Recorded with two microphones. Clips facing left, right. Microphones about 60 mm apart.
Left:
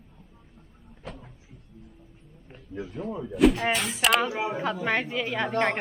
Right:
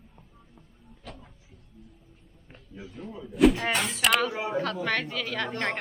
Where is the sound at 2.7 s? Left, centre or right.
Left.